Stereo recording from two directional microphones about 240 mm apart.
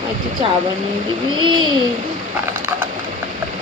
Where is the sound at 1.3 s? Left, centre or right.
Centre.